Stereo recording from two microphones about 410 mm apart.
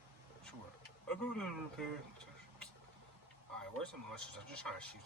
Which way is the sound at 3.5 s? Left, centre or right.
Centre.